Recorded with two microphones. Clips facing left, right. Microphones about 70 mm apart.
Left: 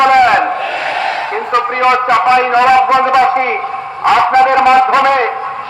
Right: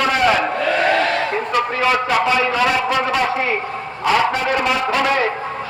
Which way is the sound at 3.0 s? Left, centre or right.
Left.